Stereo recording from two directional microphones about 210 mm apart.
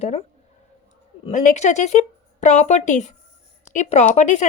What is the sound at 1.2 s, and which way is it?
A woman's voice, 35° left (ahead or behind).